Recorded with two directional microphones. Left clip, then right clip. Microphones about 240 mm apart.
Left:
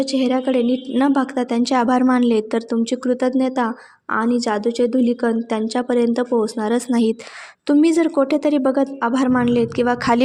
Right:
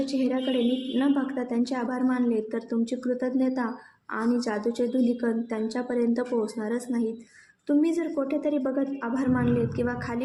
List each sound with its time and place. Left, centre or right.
0.0 s a woman's voice: left